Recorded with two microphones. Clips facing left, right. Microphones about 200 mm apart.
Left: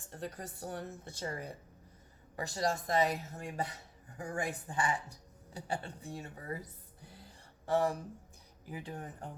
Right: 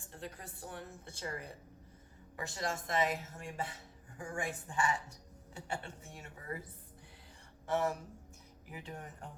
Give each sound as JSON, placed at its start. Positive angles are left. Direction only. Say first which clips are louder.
{"t": 0.1, "sound": "speech", "louder": "left 5 dB", "side_deg": 40}
{"t": 7.0, "sound": "whispering", "louder": "left 5 dB", "side_deg": 40}
{"t": 7.7, "sound": "speech", "louder": "left 3 dB", "side_deg": 35}